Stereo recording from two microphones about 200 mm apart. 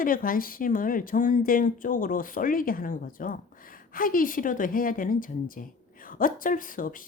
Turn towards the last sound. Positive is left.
turn(degrees=45)  # may be behind; listen again after turning